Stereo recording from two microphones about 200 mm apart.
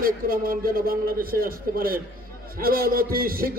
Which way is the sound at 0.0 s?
45° right (ahead or behind).